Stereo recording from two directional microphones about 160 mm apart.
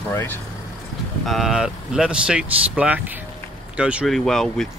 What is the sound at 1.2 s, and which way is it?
Speech, centre (ahead or behind).